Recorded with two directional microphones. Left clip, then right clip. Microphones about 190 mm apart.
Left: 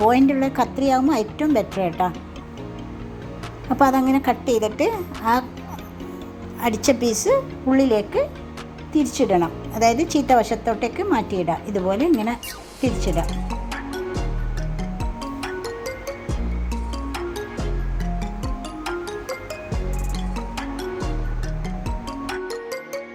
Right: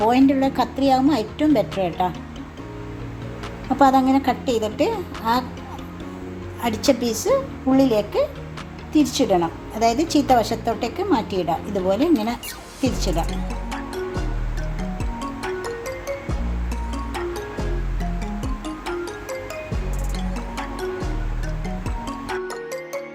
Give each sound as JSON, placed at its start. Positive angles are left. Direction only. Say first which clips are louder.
{"t": 0.1, "sound": "a woman's voice", "louder": "even", "side_deg": 15}
{"t": 3.8, "sound": "a woman's voice", "louder": "right 2 dB", "side_deg": 20}
{"t": 6.6, "sound": "a woman's voice", "louder": "left 1 dB", "side_deg": 20}
{"t": 13.3, "sound": "music", "louder": "even", "side_deg": 0}
{"t": 15.6, "sound": "music", "louder": "right 1 dB", "side_deg": 0}
{"t": 18.2, "sound": "music", "louder": "right 1 dB", "side_deg": 0}